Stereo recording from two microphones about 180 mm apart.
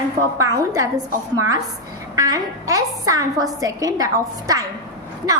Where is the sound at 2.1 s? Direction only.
20° right (ahead or behind).